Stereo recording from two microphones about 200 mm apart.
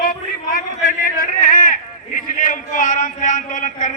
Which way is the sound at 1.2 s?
45° left (ahead or behind).